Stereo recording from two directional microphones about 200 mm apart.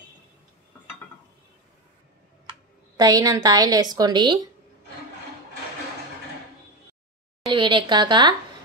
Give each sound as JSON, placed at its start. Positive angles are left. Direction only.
{"t": 3.0, "sound": "a woman's voice", "side_deg": -20}
{"t": 7.4, "sound": "a woman's voice", "side_deg": -25}